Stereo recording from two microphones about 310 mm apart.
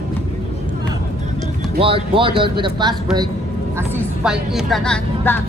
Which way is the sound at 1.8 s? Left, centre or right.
Centre.